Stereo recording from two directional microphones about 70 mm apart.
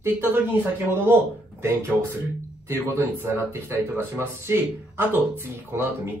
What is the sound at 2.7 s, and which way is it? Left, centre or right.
Speech, right.